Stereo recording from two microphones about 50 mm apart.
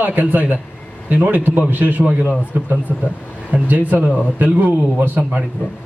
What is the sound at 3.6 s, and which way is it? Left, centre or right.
Speech, right.